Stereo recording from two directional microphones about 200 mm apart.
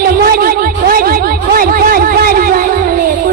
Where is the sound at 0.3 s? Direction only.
50° right (ahead or behind).